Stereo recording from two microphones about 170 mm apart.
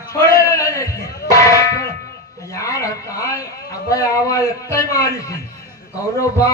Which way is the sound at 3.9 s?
20° left (ahead or behind).